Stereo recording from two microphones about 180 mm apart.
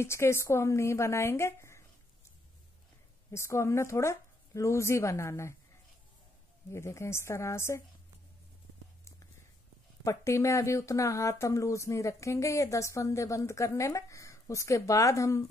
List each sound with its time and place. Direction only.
0.0 s speech: 15° left (ahead or behind)
3.3 s speech: 15° left (ahead or behind)
6.7 s speech: 15° left (ahead or behind)
10.0 s speech: 15° left (ahead or behind)